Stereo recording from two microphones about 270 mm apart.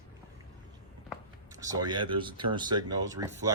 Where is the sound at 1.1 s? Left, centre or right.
Centre.